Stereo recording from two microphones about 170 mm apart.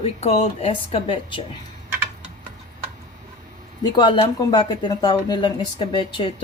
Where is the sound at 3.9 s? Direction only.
30° left (ahead or behind).